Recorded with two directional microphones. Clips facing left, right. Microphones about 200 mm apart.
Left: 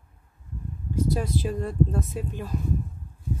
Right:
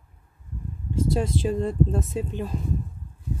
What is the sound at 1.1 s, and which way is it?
Speech, 25° right (ahead or behind).